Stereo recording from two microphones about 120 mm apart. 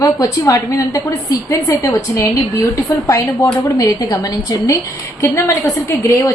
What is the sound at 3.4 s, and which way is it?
Speech, 15° left (ahead or behind).